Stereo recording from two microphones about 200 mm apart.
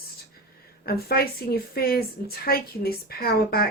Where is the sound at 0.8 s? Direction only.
50° left (ahead or behind).